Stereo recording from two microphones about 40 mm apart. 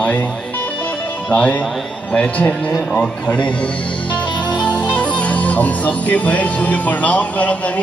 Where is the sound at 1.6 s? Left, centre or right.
Left.